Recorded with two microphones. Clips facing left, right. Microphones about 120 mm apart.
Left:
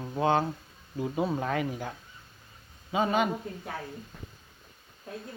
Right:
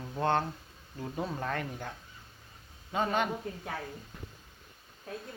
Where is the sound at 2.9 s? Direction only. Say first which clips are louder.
Left 4 dB; 5° left (ahead or behind).